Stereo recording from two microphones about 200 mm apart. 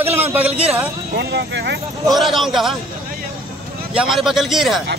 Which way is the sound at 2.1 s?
Centre (ahead or behind).